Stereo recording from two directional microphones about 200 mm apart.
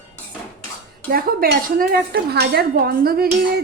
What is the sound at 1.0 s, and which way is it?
Speech, 50° right (ahead or behind).